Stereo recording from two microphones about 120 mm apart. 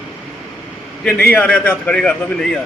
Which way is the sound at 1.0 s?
15° left (ahead or behind).